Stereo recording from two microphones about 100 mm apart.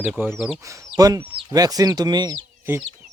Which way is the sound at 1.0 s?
40° right (ahead or behind).